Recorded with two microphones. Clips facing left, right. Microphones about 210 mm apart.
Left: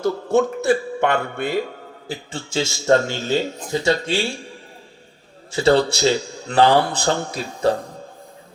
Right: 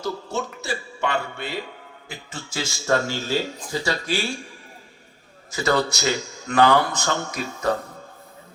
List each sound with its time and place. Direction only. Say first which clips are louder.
0.0 s speech: left 10 dB; 55° left (ahead or behind)
2.0 s a man's voice: left 7 dB; 25° left (ahead or behind)
5.5 s a man's voice: left 6 dB; 30° left (ahead or behind)